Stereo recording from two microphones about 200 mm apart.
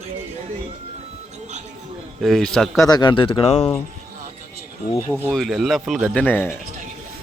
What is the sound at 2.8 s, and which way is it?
Speech, 20° left (ahead or behind).